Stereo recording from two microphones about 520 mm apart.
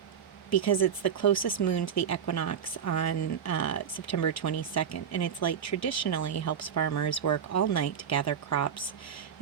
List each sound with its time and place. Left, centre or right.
0.5 s speech: left